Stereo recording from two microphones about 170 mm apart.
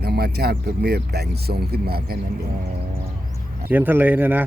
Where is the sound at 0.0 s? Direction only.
70° right (ahead or behind).